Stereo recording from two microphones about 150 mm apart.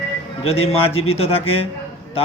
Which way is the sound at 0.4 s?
40° left (ahead or behind).